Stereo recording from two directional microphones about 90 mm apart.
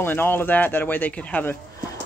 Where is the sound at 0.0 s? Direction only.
25° left (ahead or behind).